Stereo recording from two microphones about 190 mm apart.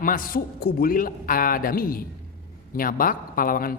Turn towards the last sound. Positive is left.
turn(degrees=50)  # may be behind; listen again after turning